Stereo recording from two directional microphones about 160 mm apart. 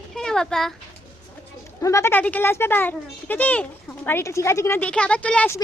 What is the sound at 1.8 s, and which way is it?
A child's voice, 20° left (ahead or behind).